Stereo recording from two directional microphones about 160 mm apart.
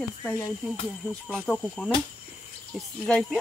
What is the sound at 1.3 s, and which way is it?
Speech, 5° left (ahead or behind).